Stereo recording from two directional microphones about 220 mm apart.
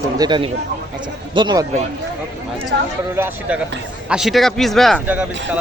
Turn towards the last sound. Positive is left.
turn(degrees=-5)  # may be behind; listen again after turning